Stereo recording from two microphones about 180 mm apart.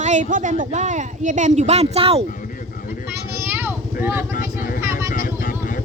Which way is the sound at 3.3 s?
10° right (ahead or behind).